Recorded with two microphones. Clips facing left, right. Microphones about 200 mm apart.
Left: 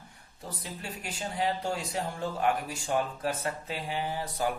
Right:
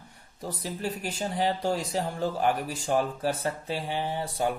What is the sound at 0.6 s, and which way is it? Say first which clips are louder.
Speech: right 9 dB; 35° right (ahead or behind).